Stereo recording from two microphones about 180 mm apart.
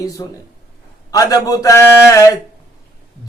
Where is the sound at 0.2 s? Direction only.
20° left (ahead or behind).